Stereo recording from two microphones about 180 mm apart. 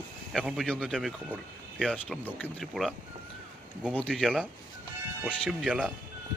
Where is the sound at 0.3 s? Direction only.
Centre (ahead or behind).